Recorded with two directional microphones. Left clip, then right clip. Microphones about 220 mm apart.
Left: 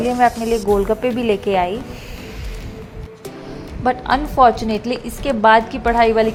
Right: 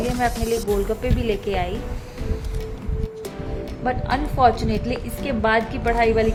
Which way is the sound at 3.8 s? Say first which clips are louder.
Left 6 dB; 20° left (ahead or behind).